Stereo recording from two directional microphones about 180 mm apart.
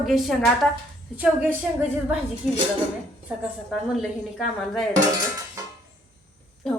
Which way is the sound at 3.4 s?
Centre (ahead or behind).